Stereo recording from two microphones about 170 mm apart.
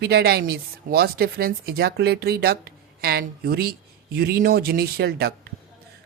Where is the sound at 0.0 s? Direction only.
65° right (ahead or behind).